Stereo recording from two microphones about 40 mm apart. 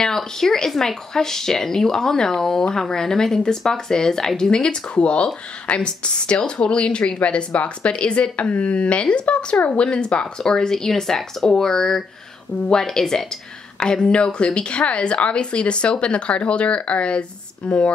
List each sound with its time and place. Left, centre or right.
0.0 s speech: centre
13.7 s speech: left